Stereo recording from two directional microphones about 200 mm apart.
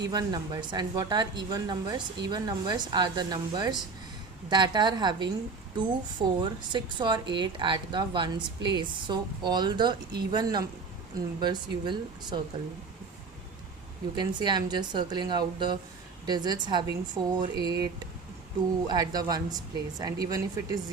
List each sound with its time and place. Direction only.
0.1 s speech: 20° right (ahead or behind)
14.2 s speech: 20° right (ahead or behind)